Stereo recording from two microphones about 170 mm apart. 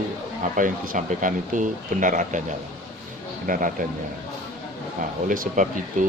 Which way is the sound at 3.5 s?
55° right (ahead or behind).